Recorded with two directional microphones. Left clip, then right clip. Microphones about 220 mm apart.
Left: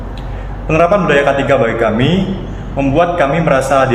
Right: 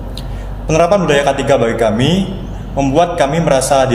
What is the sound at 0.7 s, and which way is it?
A man's voice, 40° right (ahead or behind).